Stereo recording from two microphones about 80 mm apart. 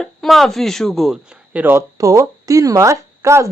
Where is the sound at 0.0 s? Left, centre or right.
Centre.